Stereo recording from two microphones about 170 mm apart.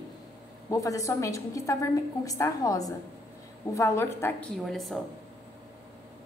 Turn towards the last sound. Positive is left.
turn(degrees=0)  # may be behind; listen again after turning